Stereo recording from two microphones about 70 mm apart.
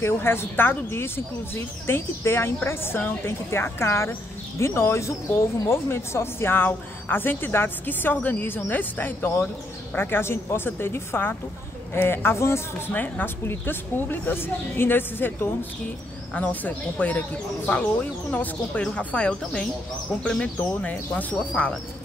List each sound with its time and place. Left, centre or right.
0.0 s speech: left
16.3 s speech: left
18.3 s speech: left